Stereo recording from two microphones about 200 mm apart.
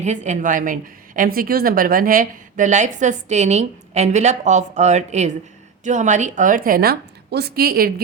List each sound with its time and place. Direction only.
0.0 s a woman's voice: 35° right (ahead or behind)